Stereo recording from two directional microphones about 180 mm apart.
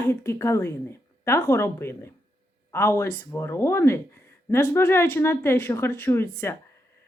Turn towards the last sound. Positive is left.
turn(degrees=15)  # may be behind; listen again after turning